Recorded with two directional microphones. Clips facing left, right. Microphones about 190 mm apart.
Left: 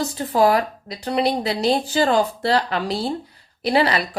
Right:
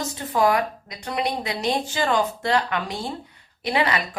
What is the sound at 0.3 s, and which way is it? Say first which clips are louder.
Speech: left 3 dB; 35° left (ahead or behind).